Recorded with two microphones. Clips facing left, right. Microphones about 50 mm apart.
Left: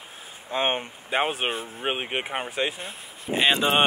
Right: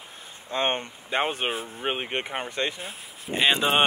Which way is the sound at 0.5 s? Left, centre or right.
Centre.